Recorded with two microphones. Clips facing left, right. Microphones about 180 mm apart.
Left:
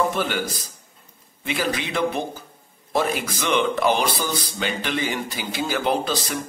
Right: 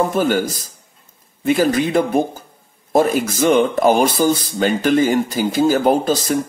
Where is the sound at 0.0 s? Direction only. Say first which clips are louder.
Right 6 dB; 45° right (ahead or behind).